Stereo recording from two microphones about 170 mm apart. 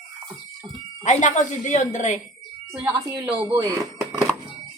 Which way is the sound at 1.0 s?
45° left (ahead or behind).